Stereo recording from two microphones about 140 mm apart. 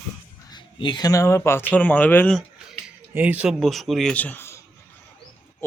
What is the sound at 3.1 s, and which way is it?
Speech, 10° right (ahead or behind).